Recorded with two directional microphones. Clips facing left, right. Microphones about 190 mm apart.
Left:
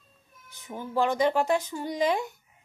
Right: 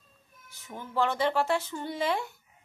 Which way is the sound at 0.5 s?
15° left (ahead or behind).